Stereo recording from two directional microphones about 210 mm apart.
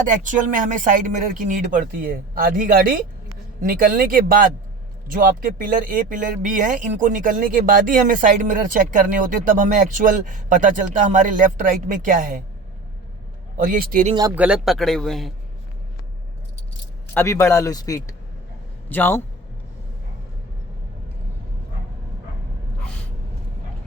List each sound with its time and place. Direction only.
0.1 s speech: 40° right (ahead or behind)
13.6 s speech: 40° right (ahead or behind)
14.3 s speech: 5° right (ahead or behind)
17.2 s speech: 10° left (ahead or behind)